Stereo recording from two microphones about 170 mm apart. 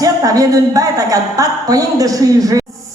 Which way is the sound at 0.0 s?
20° right (ahead or behind).